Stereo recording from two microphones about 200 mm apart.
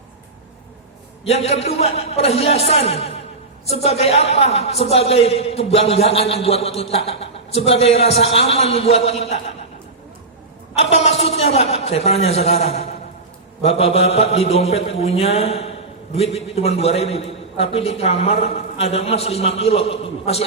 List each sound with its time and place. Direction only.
1.2 s a man's voice: 30° left (ahead or behind)
10.8 s a man's voice: 30° left (ahead or behind)